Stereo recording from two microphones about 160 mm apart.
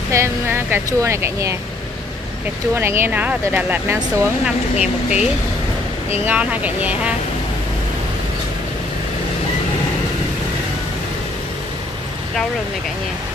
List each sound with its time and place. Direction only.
0.1 s speech: 15° right (ahead or behind)
2.7 s speech: 15° right (ahead or behind)